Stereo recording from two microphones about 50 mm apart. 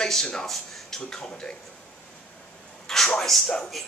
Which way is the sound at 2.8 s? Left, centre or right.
Centre.